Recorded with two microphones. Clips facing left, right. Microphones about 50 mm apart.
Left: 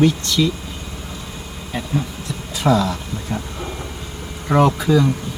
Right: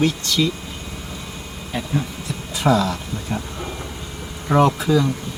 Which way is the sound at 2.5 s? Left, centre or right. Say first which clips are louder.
Left 1 dB; centre.